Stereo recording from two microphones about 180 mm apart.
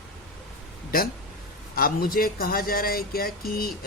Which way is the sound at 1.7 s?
55° left (ahead or behind).